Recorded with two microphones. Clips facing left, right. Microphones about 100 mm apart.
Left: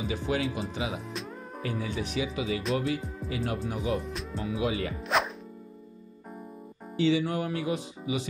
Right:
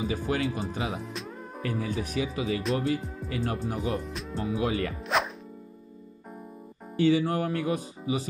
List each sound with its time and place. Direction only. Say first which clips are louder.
0.1 s speech: right 1 dB; 45° right (ahead or behind)
3.3 s music: right 1 dB; 35° right (ahead or behind)
3.6 s speech: even; 35° right (ahead or behind)
4.0 s speech: even; centre (ahead or behind)
4.4 s speech: right 2 dB; 35° right (ahead or behind)
5.0 s speech: left 1 dB; centre (ahead or behind)
7.0 s speech: right 2 dB; 45° right (ahead or behind)